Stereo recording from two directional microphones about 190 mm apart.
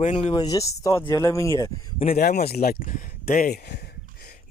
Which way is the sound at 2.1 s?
50° left (ahead or behind).